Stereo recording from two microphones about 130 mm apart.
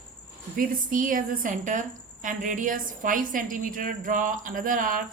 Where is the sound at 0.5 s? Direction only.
90° right.